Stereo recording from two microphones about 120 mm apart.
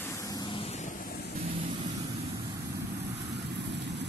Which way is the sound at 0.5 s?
60° left (ahead or behind).